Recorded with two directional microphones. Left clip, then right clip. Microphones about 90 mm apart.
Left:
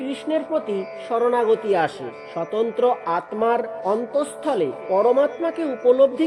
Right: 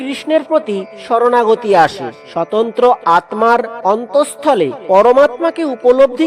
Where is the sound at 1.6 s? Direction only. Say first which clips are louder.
Right 10 dB; 45° right (ahead or behind); by 2.9 s 65° right (ahead or behind).